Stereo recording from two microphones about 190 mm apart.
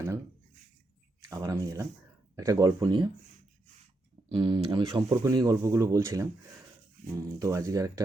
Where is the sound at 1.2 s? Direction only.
20° right (ahead or behind).